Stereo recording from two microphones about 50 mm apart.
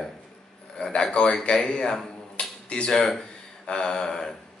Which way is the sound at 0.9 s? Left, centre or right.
Centre.